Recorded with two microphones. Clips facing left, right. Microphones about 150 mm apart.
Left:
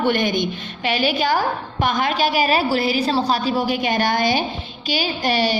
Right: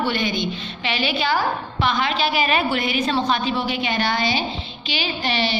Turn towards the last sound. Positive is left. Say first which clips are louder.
# left 3 dB
turn(degrees=45)  # may be behind; listen again after turning